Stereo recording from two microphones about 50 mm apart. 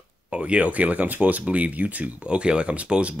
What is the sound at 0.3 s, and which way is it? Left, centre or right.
Speech, right.